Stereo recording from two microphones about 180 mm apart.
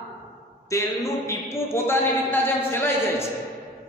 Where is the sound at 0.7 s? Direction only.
15° left (ahead or behind).